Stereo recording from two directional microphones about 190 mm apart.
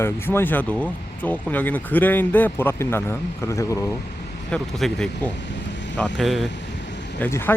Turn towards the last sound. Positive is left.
turn(degrees=10)  # may be behind; listen again after turning